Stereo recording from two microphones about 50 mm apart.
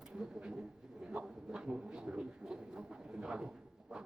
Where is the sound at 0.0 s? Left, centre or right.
Centre.